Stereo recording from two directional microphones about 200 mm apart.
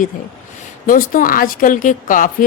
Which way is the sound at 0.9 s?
45° left (ahead or behind).